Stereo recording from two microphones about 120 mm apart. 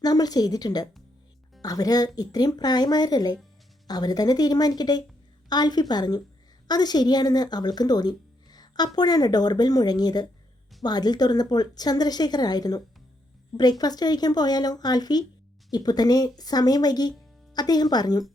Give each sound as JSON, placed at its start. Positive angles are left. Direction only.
{"t": 0.0, "sound": "speech", "side_deg": 35}